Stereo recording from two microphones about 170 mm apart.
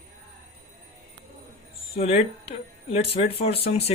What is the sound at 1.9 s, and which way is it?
Speech, 35° left (ahead or behind).